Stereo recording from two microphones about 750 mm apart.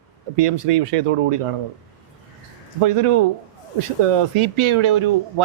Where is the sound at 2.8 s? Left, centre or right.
Right.